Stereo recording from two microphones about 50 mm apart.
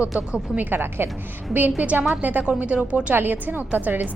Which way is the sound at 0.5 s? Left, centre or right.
Right.